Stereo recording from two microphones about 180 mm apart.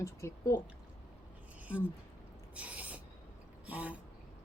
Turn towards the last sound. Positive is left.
turn(degrees=-10)  # may be behind; listen again after turning